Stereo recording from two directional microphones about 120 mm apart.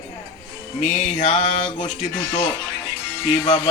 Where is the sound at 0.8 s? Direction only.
70° left (ahead or behind).